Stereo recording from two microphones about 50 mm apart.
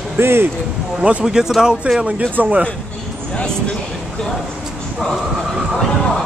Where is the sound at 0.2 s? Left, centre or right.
Right.